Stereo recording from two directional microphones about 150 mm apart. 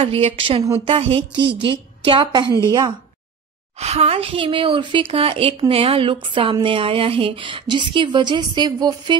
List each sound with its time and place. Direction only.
0.0 s speech: 40° right (ahead or behind)
3.8 s speech: 45° right (ahead or behind)